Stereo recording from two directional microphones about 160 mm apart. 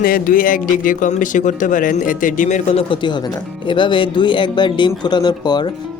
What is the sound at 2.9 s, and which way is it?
Speech, 30° left (ahead or behind).